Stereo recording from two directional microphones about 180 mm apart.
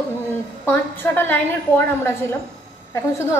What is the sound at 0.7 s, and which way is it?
A woman's voice, 10° left (ahead or behind).